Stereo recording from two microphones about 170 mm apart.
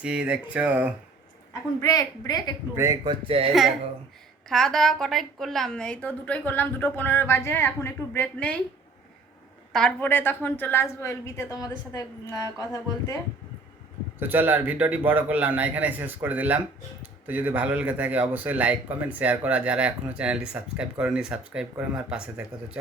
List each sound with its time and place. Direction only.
0.0 s speech: 5° right (ahead or behind)
1.8 s speech: 20° left (ahead or behind)
2.7 s speech: 20° right (ahead or behind)
4.4 s a woman's voice: centre (ahead or behind)
9.7 s a woman's voice: 5° left (ahead or behind)
14.2 s speech: 10° right (ahead or behind)